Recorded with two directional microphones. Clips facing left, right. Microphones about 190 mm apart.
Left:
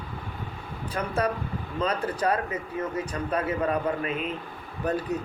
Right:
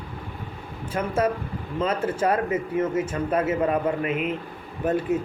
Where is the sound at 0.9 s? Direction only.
25° right (ahead or behind).